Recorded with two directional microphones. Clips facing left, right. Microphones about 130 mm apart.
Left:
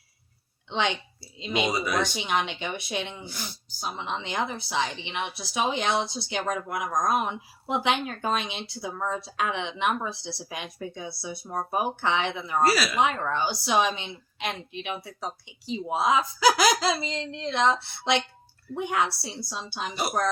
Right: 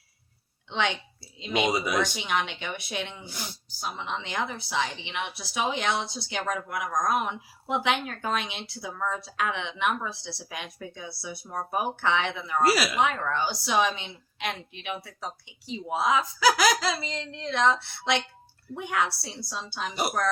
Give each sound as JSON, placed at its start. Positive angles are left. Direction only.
{"t": 0.7, "sound": "a woman's voice", "side_deg": 25}
{"t": 1.7, "sound": "speech", "side_deg": -15}
{"t": 2.0, "sound": "a woman's voice", "side_deg": 25}
{"t": 12.7, "sound": "speech", "side_deg": -15}
{"t": 13.0, "sound": "a woman's voice", "side_deg": 25}